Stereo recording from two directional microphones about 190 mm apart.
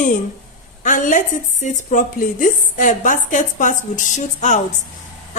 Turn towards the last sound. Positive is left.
turn(degrees=40)  # may be behind; listen again after turning